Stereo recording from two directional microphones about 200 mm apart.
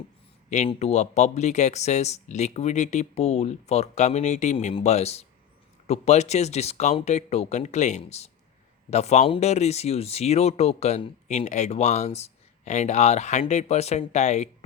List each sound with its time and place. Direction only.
0.5 s speech: 35° left (ahead or behind)